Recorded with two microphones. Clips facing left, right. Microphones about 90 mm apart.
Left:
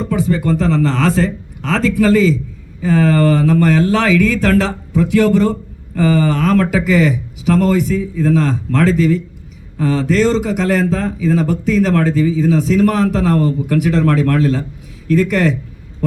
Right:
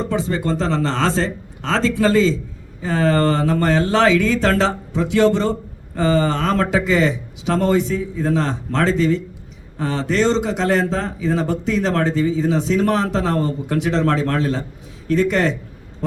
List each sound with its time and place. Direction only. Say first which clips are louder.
0.0 s speech: left 4 dB; 25° right (ahead or behind)